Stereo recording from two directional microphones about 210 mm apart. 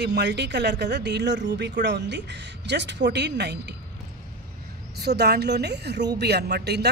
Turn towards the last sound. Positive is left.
turn(degrees=-50)  # may be behind; listen again after turning